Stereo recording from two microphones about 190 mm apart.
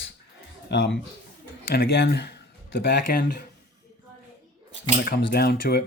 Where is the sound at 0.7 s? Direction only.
65° left (ahead or behind).